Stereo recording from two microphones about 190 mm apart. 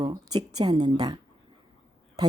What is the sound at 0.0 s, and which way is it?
A woman's voice, 20° right (ahead or behind).